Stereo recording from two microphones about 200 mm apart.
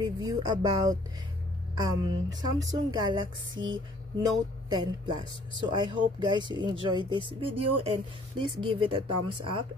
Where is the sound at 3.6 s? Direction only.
70° right (ahead or behind).